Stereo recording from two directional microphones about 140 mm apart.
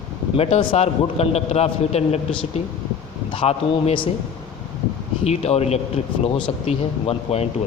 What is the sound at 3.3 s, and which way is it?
Speech, 45° left (ahead or behind).